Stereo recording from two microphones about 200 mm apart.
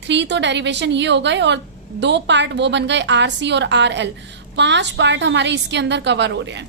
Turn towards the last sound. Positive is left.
turn(degrees=-65)  # may be behind; listen again after turning